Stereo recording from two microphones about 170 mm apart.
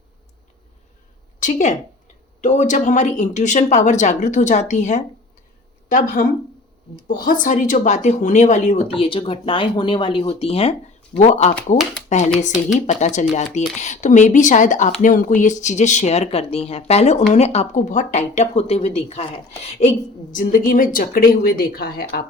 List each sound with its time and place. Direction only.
1.4 s a woman's voice: 45° left (ahead or behind)
9.0 s speech: 30° left (ahead or behind); by 22.2 s 60° left (ahead or behind)